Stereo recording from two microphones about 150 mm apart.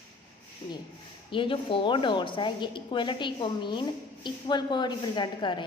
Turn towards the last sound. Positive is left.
turn(degrees=30)  # may be behind; listen again after turning